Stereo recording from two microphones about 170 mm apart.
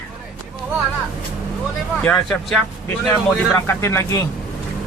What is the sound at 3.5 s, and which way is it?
Speech, 15° left (ahead or behind).